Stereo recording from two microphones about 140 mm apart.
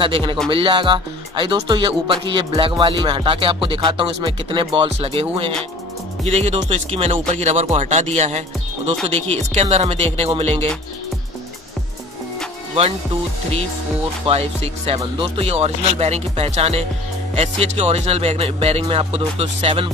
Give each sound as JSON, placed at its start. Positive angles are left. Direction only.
{"t": 0.0, "sound": "speech", "side_deg": -35}
{"t": 6.2, "sound": "speech", "side_deg": -50}
{"t": 14.2, "sound": "speech", "side_deg": -45}